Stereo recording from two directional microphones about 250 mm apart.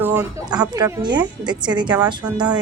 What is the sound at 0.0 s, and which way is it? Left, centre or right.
A woman's voice, centre.